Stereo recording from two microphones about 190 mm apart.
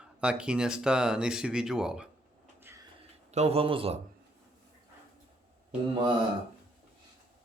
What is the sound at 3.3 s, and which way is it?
Speech, 35° right (ahead or behind).